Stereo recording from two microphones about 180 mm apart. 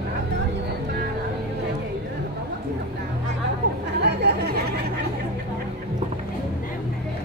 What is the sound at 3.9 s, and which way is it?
Chatter, 70° right (ahead or behind).